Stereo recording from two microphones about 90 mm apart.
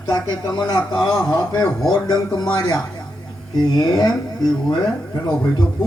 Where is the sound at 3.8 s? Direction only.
50° left (ahead or behind).